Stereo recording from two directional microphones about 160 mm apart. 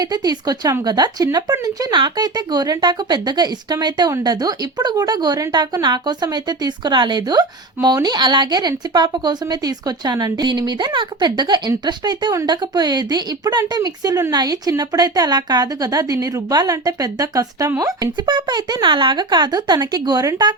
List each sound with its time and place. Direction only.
0.0 s speech: 25° right (ahead or behind)